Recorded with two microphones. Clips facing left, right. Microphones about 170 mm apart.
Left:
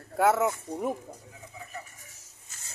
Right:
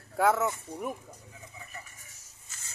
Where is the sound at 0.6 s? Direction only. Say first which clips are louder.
Left 5 dB; 25° left (ahead or behind).